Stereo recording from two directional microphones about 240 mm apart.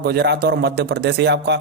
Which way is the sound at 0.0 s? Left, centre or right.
Right.